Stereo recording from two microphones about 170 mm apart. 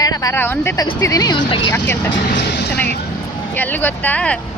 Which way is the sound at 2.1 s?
80° left.